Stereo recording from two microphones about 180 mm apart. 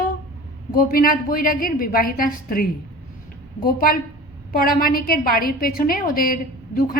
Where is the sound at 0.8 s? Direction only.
55° left (ahead or behind).